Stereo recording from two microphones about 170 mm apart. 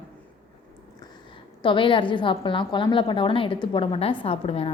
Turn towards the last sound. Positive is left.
turn(degrees=35)  # may be behind; listen again after turning